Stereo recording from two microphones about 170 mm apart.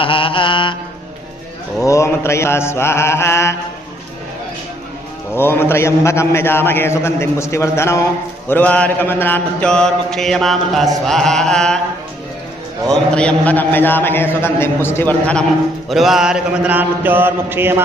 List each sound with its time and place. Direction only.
0.0 s mantra: 30° left (ahead or behind)
1.8 s a man's voice: 15° left (ahead or behind)
5.3 s a man's voice: 15° left (ahead or behind)
8.4 s mantra: 10° left (ahead or behind)
12.9 s a man's voice: 5° left (ahead or behind)
15.9 s mantra: centre (ahead or behind)